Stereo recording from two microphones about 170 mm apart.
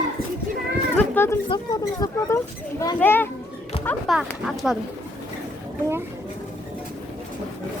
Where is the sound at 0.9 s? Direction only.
15° left (ahead or behind).